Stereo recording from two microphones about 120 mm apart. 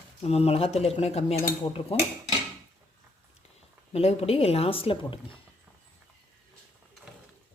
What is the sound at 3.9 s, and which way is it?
Speech, 55° left (ahead or behind).